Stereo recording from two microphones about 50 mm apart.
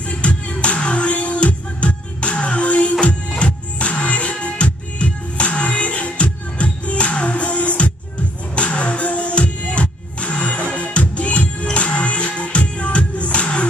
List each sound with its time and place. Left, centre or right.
0.1 s music: left